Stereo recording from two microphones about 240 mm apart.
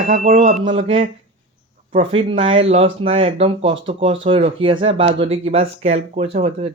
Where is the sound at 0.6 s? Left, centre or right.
Right.